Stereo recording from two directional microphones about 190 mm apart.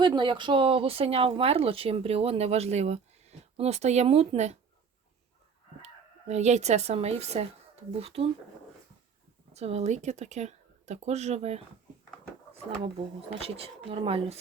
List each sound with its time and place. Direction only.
0.0 s speech: 25° right (ahead or behind)
5.8 s speech: 35° right (ahead or behind)
9.5 s speech: 35° right (ahead or behind)
13.4 s speech: 30° right (ahead or behind)